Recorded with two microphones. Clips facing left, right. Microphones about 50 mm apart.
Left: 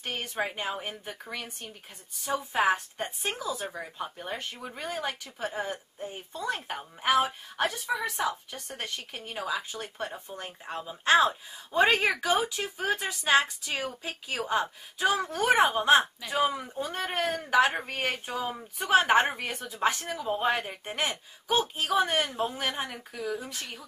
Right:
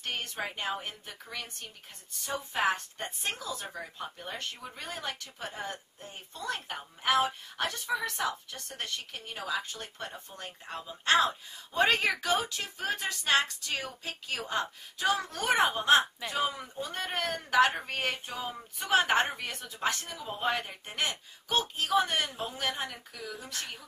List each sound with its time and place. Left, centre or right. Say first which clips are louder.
0.0 s a woman's voice: left 3 dB; centre
8.2 s speech: left 3 dB; left
8.5 s a woman's voice: left 1 dB; centre
16.9 s a woman's voice: left 3 dB; centre
17.7 s speech: left 2 dB; left
18.9 s a woman's voice: left 4 dB; centre
22.7 s a woman's voice: left 2 dB; left